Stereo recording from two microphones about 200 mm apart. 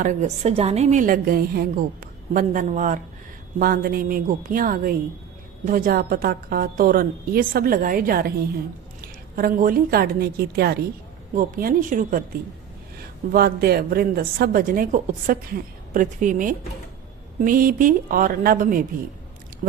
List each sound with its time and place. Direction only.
0.0 s a woman's voice: 35° right (ahead or behind)
13.3 s a woman's voice: 50° right (ahead or behind)